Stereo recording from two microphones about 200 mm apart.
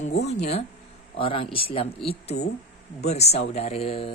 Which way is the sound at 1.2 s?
25° left (ahead or behind).